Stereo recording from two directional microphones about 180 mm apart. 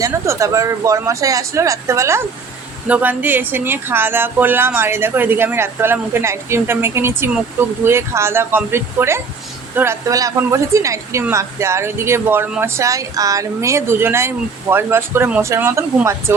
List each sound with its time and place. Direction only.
0.0 s a woman's voice: 15° right (ahead or behind)